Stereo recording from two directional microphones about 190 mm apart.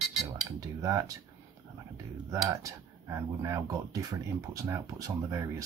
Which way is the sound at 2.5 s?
15° right (ahead or behind).